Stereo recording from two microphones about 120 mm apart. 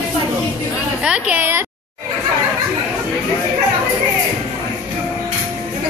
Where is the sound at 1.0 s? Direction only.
10° right (ahead or behind).